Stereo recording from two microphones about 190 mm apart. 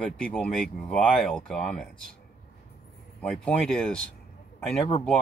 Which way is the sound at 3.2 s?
5° left (ahead or behind).